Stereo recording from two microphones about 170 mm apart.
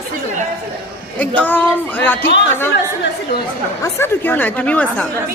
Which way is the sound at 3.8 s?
15° left (ahead or behind).